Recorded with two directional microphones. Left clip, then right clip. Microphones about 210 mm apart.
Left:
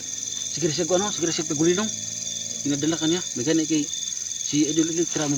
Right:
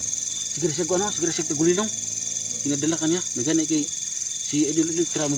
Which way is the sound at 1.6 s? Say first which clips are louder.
Right 1 dB; 5° left (ahead or behind).